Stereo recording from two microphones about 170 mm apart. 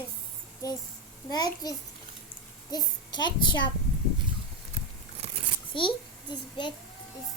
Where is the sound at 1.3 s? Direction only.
25° left (ahead or behind).